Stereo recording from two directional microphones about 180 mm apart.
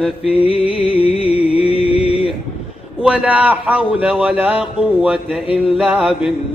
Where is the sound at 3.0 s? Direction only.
5° right (ahead or behind).